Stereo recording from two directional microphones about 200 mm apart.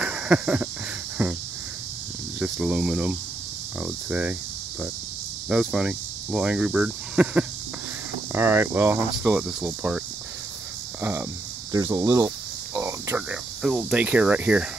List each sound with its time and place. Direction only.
0.0 s a sound: 5° right (ahead or behind)
2.4 s speech: 5° right (ahead or behind)
5.5 s speech: 5° right (ahead or behind)
11.0 s a sound: 10° right (ahead or behind)
11.7 s speech: 15° right (ahead or behind)
12.7 s cricket: 10° right (ahead or behind)